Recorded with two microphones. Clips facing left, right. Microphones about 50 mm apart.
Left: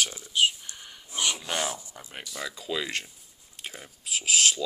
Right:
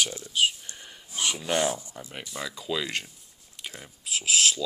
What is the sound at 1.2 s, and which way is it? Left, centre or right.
Speech, centre.